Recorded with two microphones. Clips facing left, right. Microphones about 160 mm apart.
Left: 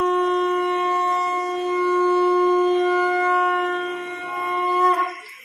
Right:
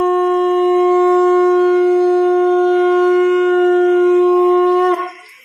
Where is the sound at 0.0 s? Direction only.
55° right (ahead or behind); by 4.9 s 75° right (ahead or behind).